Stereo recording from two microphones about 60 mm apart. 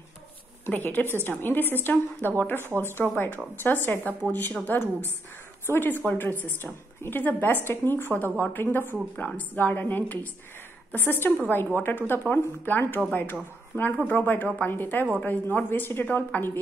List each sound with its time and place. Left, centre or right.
0.7 s a woman's voice: left